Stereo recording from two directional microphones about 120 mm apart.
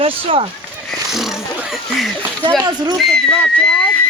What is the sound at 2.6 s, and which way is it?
Speech, 35° right (ahead or behind).